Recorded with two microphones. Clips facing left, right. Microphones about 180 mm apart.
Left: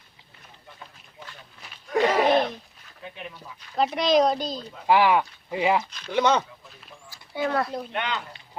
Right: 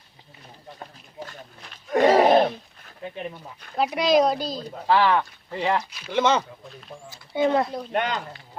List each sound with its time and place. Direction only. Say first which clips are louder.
0.8 s a sound: right 8 dB; 45° right (ahead or behind)
3.0 s speech: right 6 dB; 35° right (ahead or behind)
3.9 s speech: right 2 dB; 10° right (ahead or behind)
4.9 s speech: left 1 dB; 15° left (ahead or behind)
5.9 s speech: even; 5° right (ahead or behind)
7.1 s speech: right 5 dB; 20° right (ahead or behind)
7.9 s speech: right 6 dB; 40° right (ahead or behind)